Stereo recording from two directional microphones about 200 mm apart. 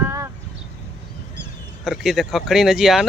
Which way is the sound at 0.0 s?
15° right (ahead or behind).